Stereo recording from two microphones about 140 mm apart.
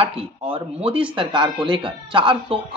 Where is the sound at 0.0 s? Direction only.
40° right (ahead or behind).